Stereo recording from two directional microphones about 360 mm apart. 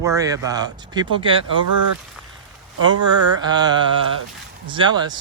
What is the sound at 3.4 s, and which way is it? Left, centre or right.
Speech, centre.